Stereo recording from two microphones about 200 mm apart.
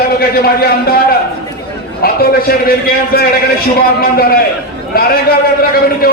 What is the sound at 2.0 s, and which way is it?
A man's voice, 50° left (ahead or behind).